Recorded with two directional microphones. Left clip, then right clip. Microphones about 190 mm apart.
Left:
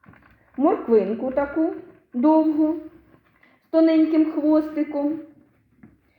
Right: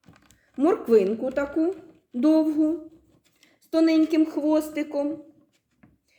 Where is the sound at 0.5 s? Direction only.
50° right (ahead or behind).